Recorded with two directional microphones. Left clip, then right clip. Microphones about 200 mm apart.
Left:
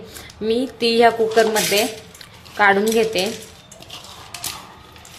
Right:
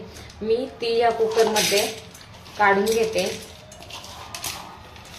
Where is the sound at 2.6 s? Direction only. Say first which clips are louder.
Left 3 dB; 45° left (ahead or behind).